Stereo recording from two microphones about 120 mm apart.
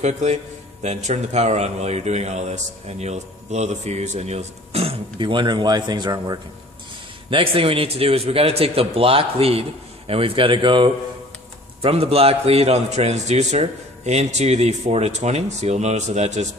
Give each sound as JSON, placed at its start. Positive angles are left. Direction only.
{"t": 0.0, "sound": "a man's voice", "side_deg": -70}
{"t": 7.2, "sound": "a man's voice", "side_deg": -50}
{"t": 11.8, "sound": "a man's voice", "side_deg": -55}